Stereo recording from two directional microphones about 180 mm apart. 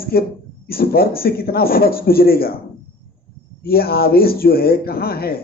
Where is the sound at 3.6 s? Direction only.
60° left (ahead or behind).